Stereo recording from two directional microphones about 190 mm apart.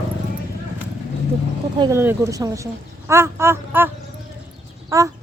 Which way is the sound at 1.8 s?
10° right (ahead or behind).